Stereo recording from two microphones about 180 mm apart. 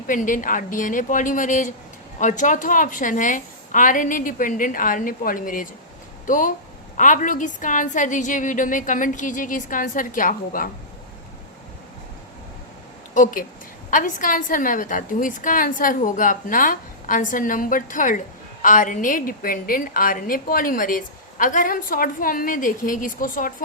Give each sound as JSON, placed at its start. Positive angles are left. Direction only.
{"t": 0.1, "sound": "a woman's voice", "side_deg": 45}
{"t": 13.1, "sound": "a woman's voice", "side_deg": 45}